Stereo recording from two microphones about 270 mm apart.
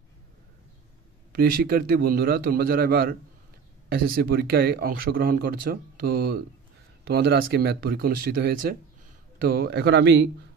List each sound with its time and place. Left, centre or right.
1.3 s speech: right